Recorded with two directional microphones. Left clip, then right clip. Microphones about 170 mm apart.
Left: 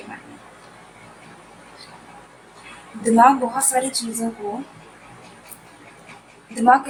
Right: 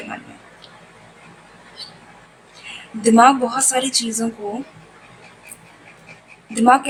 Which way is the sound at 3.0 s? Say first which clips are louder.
Right 2 dB; 30° right (ahead or behind).